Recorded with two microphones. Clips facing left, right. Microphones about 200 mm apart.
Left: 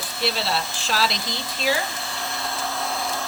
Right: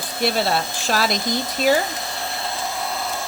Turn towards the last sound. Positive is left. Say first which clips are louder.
# right 1 dB
turn(degrees=-5)  # may be behind; listen again after turning